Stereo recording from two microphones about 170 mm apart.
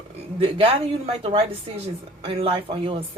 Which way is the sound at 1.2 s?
35° right (ahead or behind).